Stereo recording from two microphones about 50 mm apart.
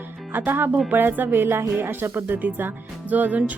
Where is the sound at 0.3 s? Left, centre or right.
Right.